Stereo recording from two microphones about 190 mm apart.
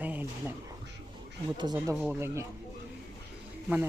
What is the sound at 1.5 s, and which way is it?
Speech, 20° right (ahead or behind).